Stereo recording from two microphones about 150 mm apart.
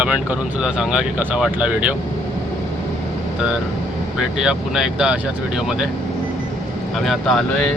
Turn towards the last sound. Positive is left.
turn(degrees=0)  # may be behind; listen again after turning